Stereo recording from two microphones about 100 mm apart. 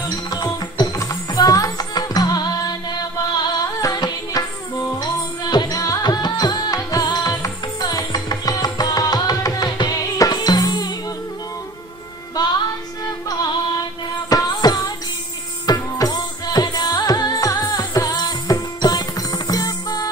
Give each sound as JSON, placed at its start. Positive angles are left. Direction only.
{"t": 0.3, "sound": "music", "side_deg": 45}
{"t": 3.8, "sound": "music", "side_deg": 40}
{"t": 12.4, "sound": "music", "side_deg": 40}
{"t": 14.3, "sound": "a sound", "side_deg": 45}
{"t": 15.6, "sound": "music", "side_deg": 40}